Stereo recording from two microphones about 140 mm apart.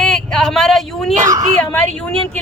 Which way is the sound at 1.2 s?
25° right (ahead or behind).